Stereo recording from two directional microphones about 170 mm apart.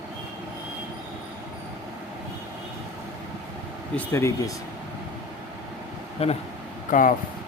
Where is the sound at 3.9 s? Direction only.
10° left (ahead or behind).